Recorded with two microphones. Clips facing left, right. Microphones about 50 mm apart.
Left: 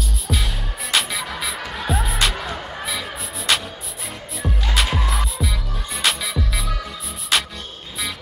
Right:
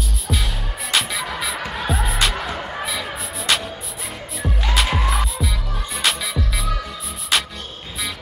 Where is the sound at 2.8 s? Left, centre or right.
Centre.